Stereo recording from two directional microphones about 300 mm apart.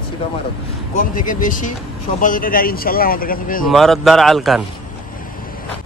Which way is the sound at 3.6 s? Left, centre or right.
Centre.